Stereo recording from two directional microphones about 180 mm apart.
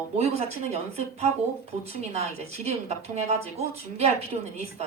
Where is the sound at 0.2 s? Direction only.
35° right (ahead or behind).